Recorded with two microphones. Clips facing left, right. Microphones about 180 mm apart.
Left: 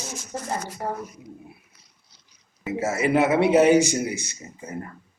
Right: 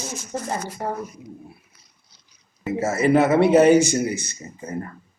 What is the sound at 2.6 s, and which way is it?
Speech, 10° left (ahead or behind).